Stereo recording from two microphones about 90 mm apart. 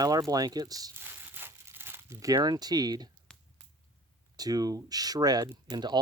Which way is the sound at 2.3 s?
50° right (ahead or behind).